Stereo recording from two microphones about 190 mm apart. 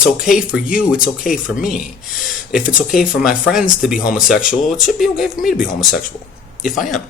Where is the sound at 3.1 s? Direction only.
5° right (ahead or behind).